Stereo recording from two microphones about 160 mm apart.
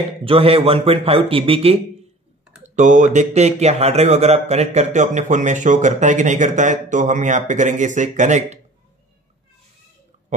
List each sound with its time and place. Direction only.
0.2 s a man's voice: 35° right (ahead or behind)
2.6 s speech: 50° right (ahead or behind)